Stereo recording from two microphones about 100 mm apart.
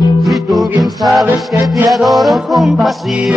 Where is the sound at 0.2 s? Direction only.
Centre (ahead or behind).